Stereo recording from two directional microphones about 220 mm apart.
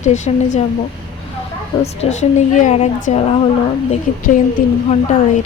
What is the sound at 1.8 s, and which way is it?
A woman's voice, 30° left (ahead or behind).